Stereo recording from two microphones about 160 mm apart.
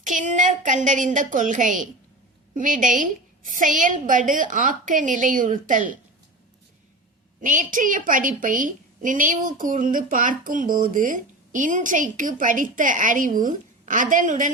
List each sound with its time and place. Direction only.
0.0 s a woman's voice: 50° right (ahead or behind)
7.4 s a woman's voice: 55° right (ahead or behind)